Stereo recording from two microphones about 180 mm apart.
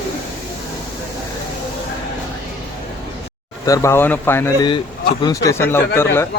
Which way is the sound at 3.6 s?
15° left (ahead or behind).